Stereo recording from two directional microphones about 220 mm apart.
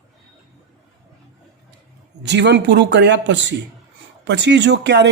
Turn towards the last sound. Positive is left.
turn(degrees=-50)  # may be behind; listen again after turning